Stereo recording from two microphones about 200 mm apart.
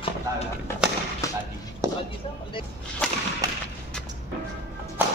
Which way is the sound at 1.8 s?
15° right (ahead or behind).